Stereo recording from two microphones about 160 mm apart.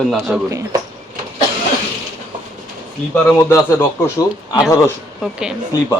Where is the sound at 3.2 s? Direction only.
20° left (ahead or behind).